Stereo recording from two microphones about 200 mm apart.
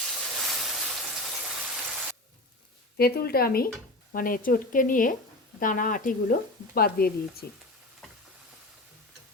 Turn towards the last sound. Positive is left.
turn(degrees=50)  # may be behind; listen again after turning